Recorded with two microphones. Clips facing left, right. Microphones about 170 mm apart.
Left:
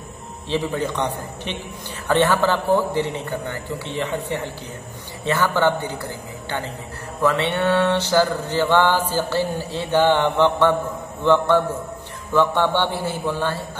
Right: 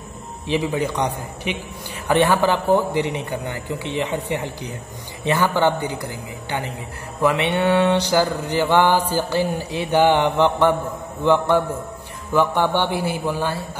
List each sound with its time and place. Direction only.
0.5 s mantra: 10° right (ahead or behind)